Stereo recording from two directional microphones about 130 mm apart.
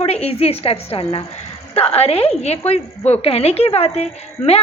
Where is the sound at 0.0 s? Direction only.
55° left (ahead or behind).